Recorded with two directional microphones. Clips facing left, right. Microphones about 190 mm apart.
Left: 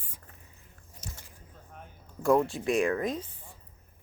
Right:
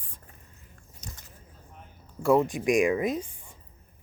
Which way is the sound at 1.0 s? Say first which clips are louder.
Left 1 dB; 10° left (ahead or behind).